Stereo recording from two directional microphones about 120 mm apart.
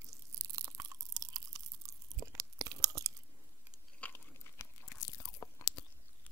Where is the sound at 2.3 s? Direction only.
30° right (ahead or behind).